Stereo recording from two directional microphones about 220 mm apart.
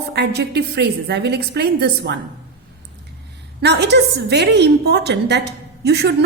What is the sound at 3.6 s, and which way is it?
A woman's voice, 50° right (ahead or behind).